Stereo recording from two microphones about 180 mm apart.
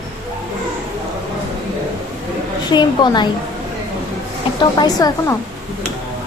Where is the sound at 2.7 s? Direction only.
25° left (ahead or behind).